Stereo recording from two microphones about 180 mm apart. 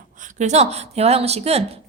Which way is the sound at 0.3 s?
40° right (ahead or behind).